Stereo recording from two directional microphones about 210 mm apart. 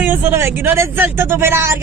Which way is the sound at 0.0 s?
10° right (ahead or behind).